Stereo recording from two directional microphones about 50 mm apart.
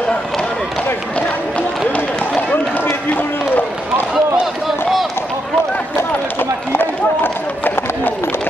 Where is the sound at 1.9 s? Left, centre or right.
Left.